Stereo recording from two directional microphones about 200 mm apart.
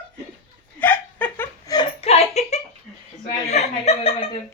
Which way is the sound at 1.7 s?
30° left (ahead or behind).